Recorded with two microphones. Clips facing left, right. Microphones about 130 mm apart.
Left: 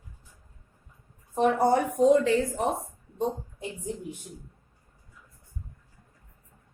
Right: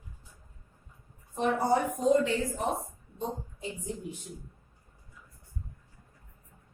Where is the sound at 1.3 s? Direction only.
60° left (ahead or behind).